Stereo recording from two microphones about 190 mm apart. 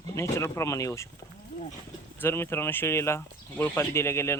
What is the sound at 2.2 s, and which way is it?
Speech, 15° left (ahead or behind).